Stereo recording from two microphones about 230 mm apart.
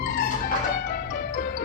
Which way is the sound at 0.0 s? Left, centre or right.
Left.